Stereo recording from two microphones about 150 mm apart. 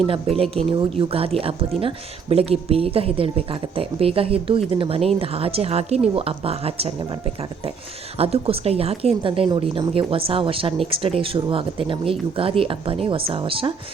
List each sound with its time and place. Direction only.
0.0 s a woman's voice: 40° right (ahead or behind)
8.2 s a woman's voice: 40° right (ahead or behind)